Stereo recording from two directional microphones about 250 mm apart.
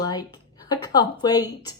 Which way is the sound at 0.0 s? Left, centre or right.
Centre.